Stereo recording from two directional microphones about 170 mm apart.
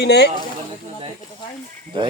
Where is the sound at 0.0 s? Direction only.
75° left (ahead or behind).